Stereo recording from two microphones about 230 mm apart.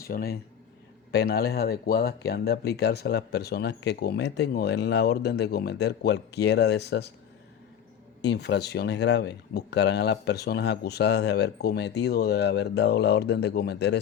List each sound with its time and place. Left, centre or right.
0.0 s speech: left
8.2 s speech: left